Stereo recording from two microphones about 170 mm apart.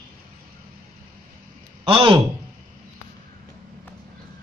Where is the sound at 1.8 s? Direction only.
30° right (ahead or behind).